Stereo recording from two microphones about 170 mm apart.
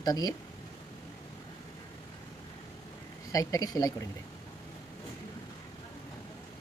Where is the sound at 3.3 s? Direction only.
20° left (ahead or behind).